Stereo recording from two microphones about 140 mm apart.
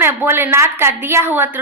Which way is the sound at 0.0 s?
15° right (ahead or behind).